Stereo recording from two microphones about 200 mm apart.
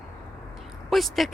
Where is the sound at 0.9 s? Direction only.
Centre (ahead or behind).